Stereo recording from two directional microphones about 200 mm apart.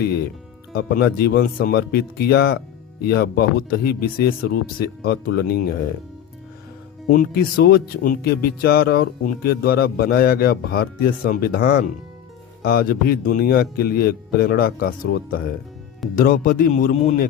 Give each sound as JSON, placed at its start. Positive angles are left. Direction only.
{"t": 0.0, "sound": "speech", "side_deg": 50}
{"t": 7.1, "sound": "speech", "side_deg": 50}